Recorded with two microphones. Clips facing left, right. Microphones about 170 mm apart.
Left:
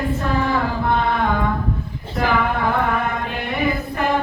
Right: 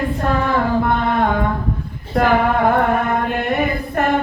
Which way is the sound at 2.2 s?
50° right (ahead or behind).